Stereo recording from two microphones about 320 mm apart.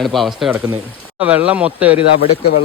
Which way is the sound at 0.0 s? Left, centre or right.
Centre.